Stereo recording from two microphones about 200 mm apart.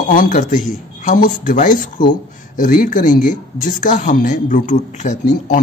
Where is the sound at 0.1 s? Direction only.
45° left (ahead or behind).